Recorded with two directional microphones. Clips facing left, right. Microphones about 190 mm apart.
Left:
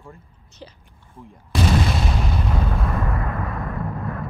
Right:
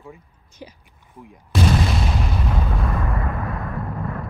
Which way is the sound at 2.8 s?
Centre (ahead or behind).